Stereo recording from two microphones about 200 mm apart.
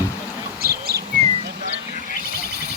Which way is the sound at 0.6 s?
50° right (ahead or behind).